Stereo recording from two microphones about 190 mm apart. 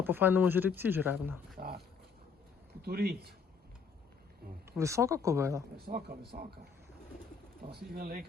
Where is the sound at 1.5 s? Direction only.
55° right (ahead or behind).